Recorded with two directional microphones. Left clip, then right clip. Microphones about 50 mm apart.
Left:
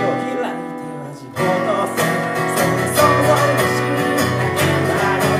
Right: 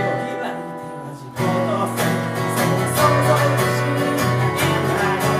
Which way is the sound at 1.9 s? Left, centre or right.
Left.